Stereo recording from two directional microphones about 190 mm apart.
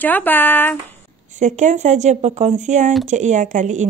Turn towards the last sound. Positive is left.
turn(degrees=-40)  # may be behind; listen again after turning